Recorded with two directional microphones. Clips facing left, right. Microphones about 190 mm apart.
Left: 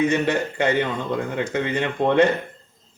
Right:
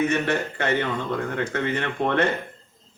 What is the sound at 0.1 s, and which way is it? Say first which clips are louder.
A man's voice: left 2 dB; 15° left (ahead or behind).